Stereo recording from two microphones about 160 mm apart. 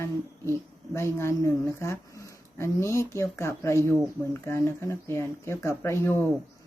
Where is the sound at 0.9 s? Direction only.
15° left (ahead or behind).